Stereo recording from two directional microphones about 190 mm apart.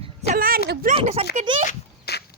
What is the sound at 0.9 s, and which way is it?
Speech, 30° right (ahead or behind).